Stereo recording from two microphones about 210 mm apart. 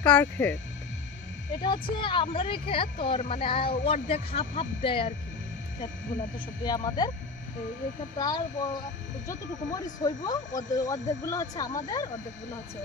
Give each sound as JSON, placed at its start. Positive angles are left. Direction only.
{"t": 0.0, "sound": "speech", "side_deg": 5}
{"t": 1.6, "sound": "speech", "side_deg": 20}
{"t": 6.6, "sound": "speech", "side_deg": 20}
{"t": 8.2, "sound": "speech", "side_deg": 20}
{"t": 10.0, "sound": "speech", "side_deg": 20}